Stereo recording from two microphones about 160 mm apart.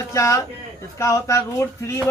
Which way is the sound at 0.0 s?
20° left (ahead or behind).